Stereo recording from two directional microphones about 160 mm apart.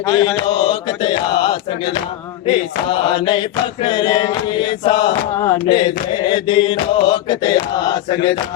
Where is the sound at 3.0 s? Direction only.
30° left (ahead or behind).